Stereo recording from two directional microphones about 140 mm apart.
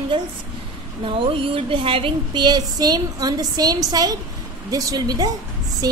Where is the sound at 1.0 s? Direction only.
40° right (ahead or behind).